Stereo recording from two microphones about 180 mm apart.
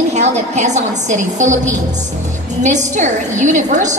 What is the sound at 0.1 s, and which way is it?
A woman's voice, 40° right (ahead or behind).